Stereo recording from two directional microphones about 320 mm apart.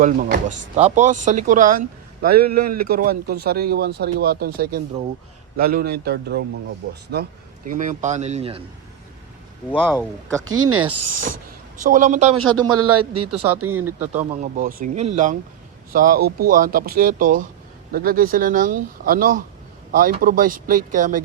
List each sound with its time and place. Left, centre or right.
0.0 s speech: right
9.7 s speech: centre
10.8 s speech: right
11.2 s speech: right
12.4 s speech: right
14.0 s speech: right